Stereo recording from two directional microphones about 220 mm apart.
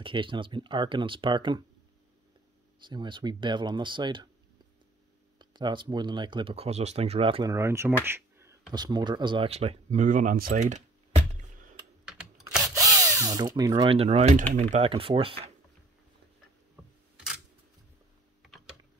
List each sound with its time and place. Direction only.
0.0 s speech: 25° right (ahead or behind)
2.8 s speech: 20° right (ahead or behind)
5.4 s speech: 20° right (ahead or behind)
7.5 s speech: 10° right (ahead or behind)
8.0 s a sound: 10° right (ahead or behind)
8.7 s speech: 20° right (ahead or behind)
12.0 s typing: 5° right (ahead or behind)
12.6 s speech: 15° right (ahead or behind)
16.8 s camera: 5° right (ahead or behind)
18.4 s typing: centre (ahead or behind)